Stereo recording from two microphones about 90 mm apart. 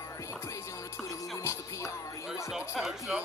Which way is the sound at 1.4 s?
35° left (ahead or behind).